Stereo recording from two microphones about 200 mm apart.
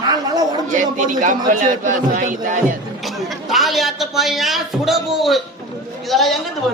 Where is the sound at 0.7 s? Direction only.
40° right (ahead or behind).